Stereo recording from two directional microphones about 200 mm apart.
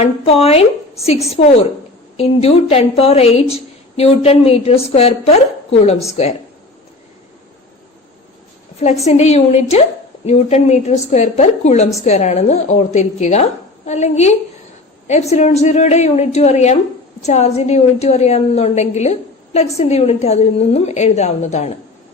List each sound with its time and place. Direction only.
0.0 s a woman's voice: 30° left (ahead or behind)
8.8 s a woman's voice: 35° left (ahead or behind)